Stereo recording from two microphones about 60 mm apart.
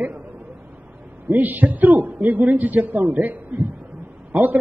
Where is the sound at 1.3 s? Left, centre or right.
Right.